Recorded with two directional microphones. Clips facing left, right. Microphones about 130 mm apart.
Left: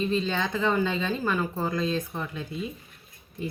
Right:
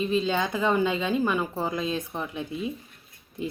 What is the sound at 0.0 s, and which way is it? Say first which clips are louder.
Speech: right 2 dB; 15° right (ahead or behind).